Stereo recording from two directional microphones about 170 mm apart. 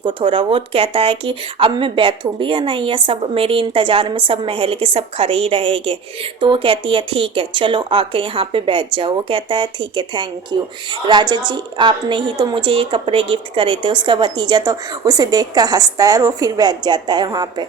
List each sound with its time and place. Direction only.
0.0 s a woman's voice: 30° right (ahead or behind)